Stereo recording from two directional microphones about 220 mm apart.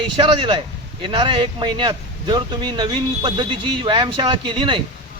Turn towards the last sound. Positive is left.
turn(degrees=-20)  # may be behind; listen again after turning